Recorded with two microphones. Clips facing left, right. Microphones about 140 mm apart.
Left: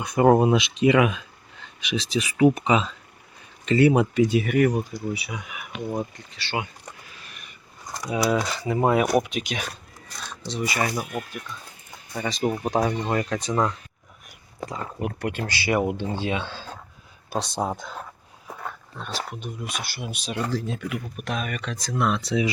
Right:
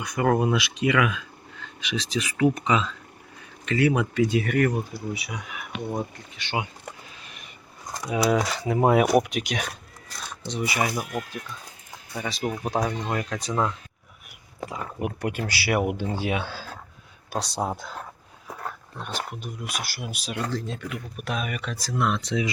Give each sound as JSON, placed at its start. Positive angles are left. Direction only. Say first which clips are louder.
{"t": 0.0, "sound": "speech", "louder": "left 5 dB", "side_deg": 25}
{"t": 5.1, "sound": "speech", "louder": "left 1 dB", "side_deg": 0}
{"t": 6.3, "sound": "speech", "louder": "even", "side_deg": -15}
{"t": 7.3, "sound": "a sound", "louder": "right 1 dB", "side_deg": -25}
{"t": 8.0, "sound": "speech", "louder": "right 1 dB", "side_deg": -5}
{"t": 10.4, "sound": "speech", "louder": "even", "side_deg": -15}
{"t": 12.1, "sound": "speech", "louder": "left 4 dB", "side_deg": -5}
{"t": 18.9, "sound": "speech", "louder": "left 1 dB", "side_deg": -10}
{"t": 21.2, "sound": "speech", "louder": "even", "side_deg": -5}